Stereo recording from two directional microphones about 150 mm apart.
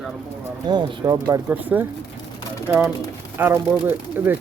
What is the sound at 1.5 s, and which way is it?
Speech, 10° right (ahead or behind).